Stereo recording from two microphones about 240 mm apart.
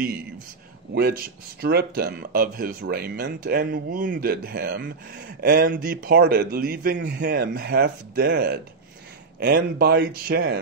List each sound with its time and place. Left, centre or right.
1.6 s speech: right